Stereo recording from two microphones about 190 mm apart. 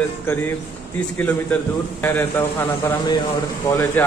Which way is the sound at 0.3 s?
10° left (ahead or behind).